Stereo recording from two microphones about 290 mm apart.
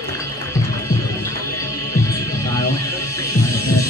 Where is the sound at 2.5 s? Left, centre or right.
Centre.